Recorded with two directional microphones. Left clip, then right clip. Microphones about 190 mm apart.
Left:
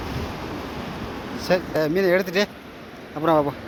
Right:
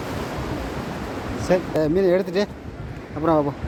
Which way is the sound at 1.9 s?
Centre (ahead or behind).